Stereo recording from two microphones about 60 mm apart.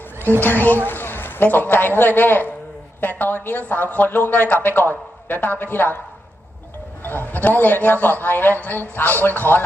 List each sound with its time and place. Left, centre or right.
0.4 s a man's voice: left
7.0 s a man's voice: left